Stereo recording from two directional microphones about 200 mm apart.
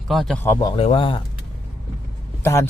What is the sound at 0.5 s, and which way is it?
Speech, 20° left (ahead or behind).